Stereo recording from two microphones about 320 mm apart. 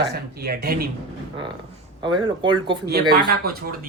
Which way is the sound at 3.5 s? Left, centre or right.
Right.